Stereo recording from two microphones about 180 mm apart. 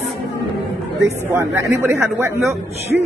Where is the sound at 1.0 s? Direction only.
15° right (ahead or behind).